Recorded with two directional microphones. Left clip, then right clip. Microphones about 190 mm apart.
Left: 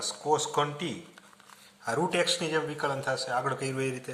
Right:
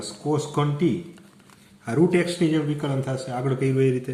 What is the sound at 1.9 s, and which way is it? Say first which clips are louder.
Speech: right 5 dB; 25° left (ahead or behind).